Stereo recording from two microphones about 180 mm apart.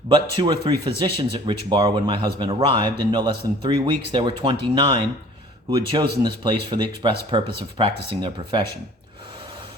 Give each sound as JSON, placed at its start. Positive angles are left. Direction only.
{"t": 0.1, "sound": "a man's voice", "side_deg": -25}